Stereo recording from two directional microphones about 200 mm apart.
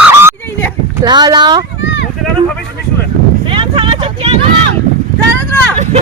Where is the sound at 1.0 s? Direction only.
20° right (ahead or behind).